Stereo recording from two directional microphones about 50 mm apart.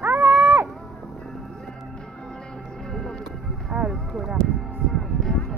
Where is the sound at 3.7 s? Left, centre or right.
Centre.